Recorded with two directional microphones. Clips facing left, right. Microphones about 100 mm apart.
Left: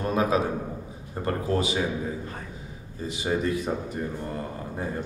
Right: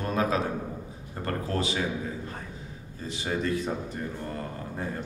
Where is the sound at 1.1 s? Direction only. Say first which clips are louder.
Left 4 dB; 15° left (ahead or behind).